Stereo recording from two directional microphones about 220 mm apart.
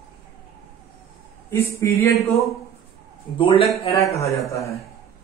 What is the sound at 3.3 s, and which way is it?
A man's voice, 25° left (ahead or behind).